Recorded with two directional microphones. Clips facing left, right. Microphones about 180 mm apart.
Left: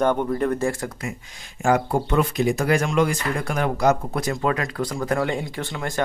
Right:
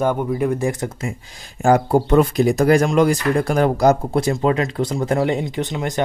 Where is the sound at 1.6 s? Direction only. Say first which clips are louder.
Right 5 dB; 35° right (ahead or behind).